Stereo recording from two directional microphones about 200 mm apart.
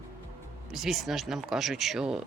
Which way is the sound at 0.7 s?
Centre (ahead or behind).